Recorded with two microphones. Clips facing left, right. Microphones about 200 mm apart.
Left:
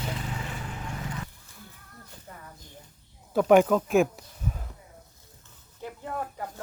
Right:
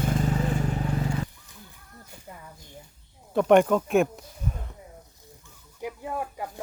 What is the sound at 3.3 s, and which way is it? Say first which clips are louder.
Speech: even; centre (ahead or behind).